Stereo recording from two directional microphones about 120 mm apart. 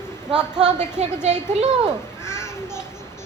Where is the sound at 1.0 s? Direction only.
75° right (ahead or behind).